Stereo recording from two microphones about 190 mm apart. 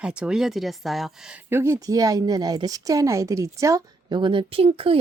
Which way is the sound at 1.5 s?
15° right (ahead or behind).